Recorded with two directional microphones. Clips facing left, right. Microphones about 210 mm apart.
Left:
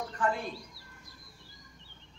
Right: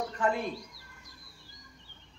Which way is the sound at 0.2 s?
25° right (ahead or behind).